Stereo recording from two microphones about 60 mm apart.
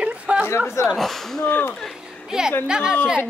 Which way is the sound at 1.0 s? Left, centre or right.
Centre.